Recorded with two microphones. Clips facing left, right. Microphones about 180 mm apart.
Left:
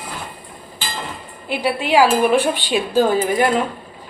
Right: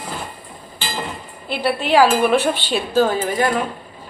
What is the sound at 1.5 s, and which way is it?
Speech, 10° left (ahead or behind).